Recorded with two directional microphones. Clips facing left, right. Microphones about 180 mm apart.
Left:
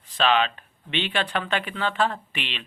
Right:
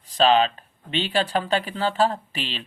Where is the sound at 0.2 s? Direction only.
35° right (ahead or behind).